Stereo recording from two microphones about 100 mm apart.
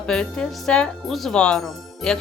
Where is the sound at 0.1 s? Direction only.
5° left (ahead or behind).